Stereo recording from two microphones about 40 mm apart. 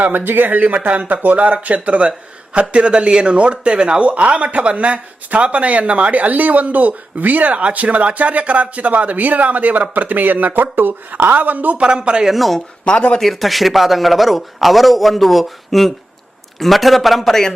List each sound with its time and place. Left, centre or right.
0.1 s speech: right
4.1 s speech: right
11.8 s speech: right
12.3 s a man's voice: centre
12.8 s speech: left
13.1 s a man's voice: centre